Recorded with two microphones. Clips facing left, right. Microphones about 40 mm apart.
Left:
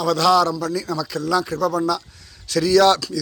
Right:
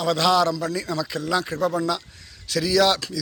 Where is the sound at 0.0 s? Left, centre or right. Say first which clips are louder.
Left 3 dB; right.